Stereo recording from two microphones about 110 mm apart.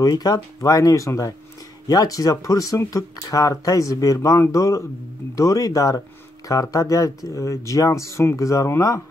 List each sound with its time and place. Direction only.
0.0 s speech: 35° left (ahead or behind)